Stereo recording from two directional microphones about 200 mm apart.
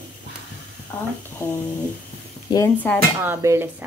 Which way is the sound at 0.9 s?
10° left (ahead or behind).